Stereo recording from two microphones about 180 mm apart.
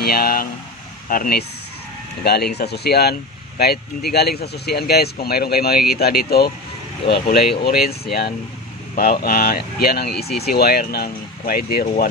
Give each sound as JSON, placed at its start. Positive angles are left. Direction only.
{"t": 0.0, "sound": "speech", "side_deg": 55}
{"t": 2.2, "sound": "speech", "side_deg": 65}